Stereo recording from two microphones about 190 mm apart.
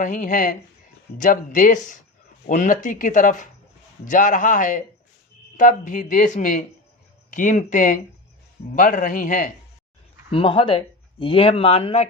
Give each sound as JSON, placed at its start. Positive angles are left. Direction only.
{"t": 0.0, "sound": "speech", "side_deg": 40}
{"t": 10.3, "sound": "speech", "side_deg": 30}